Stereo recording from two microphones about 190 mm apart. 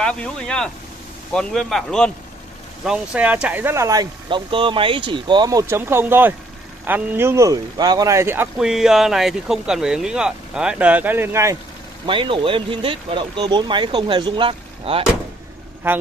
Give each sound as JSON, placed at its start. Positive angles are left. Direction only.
{"t": 0.0, "sound": "speech", "side_deg": 5}
{"t": 12.1, "sound": "speech", "side_deg": -25}